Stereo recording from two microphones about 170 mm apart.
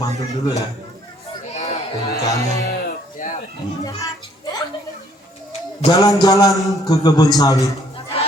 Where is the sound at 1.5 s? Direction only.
40° left (ahead or behind).